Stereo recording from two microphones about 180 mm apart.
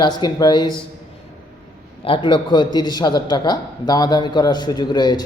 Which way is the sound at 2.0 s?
30° left (ahead or behind).